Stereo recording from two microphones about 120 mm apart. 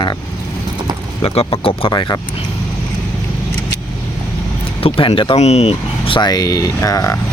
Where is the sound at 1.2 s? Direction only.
50° left (ahead or behind).